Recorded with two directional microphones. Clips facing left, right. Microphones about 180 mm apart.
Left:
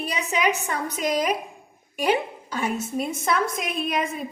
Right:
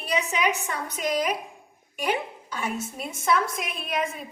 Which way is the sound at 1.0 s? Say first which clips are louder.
Left 2 dB; 40° left (ahead or behind).